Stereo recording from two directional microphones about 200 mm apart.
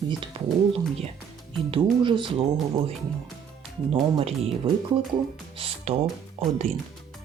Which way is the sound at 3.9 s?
25° right (ahead or behind).